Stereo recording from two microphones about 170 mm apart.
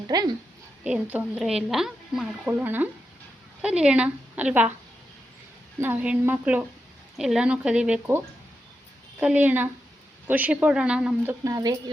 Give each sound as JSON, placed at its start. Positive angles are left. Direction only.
{"t": 0.1, "sound": "speech", "side_deg": -25}
{"t": 0.9, "sound": "a woman's voice", "side_deg": -10}
{"t": 5.8, "sound": "a woman's voice", "side_deg": -10}
{"t": 9.2, "sound": "a woman's voice", "side_deg": -10}
{"t": 11.4, "sound": "speech", "side_deg": -20}